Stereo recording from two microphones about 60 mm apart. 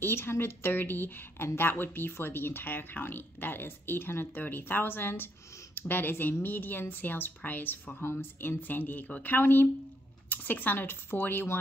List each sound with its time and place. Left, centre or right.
0.0 s speech: left